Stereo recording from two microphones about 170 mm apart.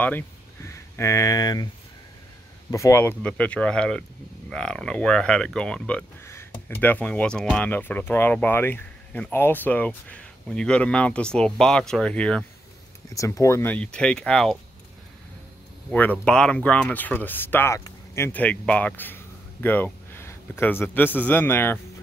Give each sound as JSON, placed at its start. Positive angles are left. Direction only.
{"t": 0.7, "sound": "speech", "side_deg": 15}
{"t": 2.7, "sound": "speech", "side_deg": 15}
{"t": 13.1, "sound": "speech", "side_deg": 20}
{"t": 15.9, "sound": "speech", "side_deg": 10}